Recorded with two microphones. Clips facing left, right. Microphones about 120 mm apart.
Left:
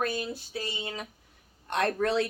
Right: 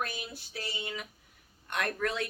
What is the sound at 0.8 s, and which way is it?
Speech, 35° left (ahead or behind).